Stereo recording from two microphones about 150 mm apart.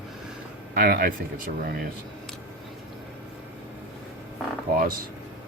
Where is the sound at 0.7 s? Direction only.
90° right.